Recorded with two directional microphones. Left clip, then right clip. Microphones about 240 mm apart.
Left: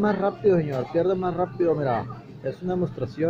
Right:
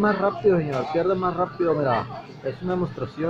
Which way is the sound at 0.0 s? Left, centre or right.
Centre.